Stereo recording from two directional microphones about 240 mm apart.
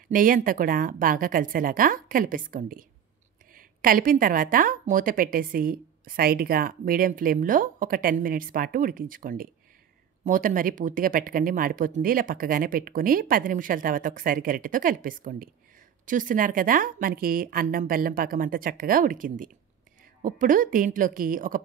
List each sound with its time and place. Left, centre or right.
0.1 s a woman's voice: right